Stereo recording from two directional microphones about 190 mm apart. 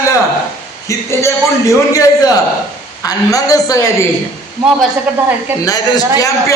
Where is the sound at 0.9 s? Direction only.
15° left (ahead or behind).